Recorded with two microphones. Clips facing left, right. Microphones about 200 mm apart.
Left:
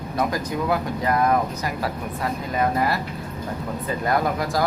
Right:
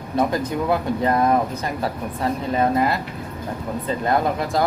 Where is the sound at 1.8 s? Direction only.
30° right (ahead or behind).